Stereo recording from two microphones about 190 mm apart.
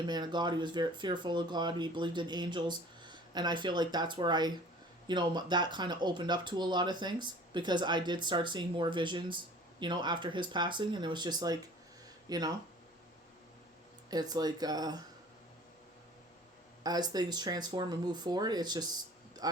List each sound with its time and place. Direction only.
0.1 s speech: 25° right (ahead or behind)
14.1 s speech: 20° right (ahead or behind)
16.8 s speech: 20° right (ahead or behind)